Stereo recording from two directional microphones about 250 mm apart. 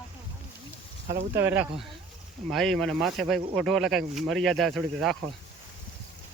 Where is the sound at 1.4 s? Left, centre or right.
Centre.